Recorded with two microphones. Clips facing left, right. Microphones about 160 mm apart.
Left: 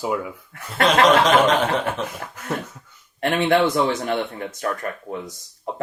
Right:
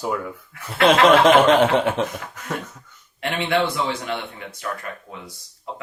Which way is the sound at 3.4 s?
45° left (ahead or behind).